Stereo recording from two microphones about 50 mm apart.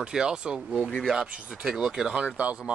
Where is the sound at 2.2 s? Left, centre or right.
Right.